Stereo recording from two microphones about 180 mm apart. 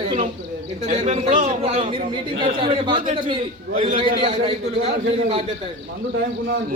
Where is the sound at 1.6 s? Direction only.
30° right (ahead or behind).